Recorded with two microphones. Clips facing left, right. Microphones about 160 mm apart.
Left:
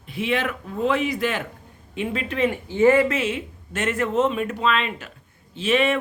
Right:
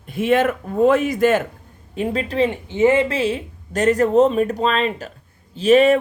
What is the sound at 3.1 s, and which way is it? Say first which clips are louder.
Speech: right 4 dB; 35° right (ahead or behind).